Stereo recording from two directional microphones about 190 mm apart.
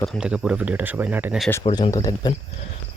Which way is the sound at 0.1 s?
5° right (ahead or behind).